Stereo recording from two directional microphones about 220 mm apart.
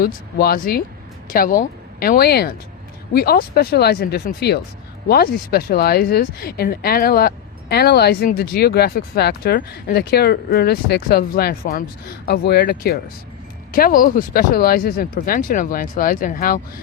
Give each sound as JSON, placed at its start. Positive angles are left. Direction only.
{"t": 0.0, "sound": "speech", "side_deg": 45}